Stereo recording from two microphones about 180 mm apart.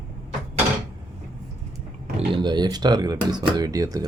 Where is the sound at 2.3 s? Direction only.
25° right (ahead or behind).